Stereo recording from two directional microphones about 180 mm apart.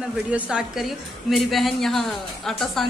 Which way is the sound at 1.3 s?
Centre (ahead or behind).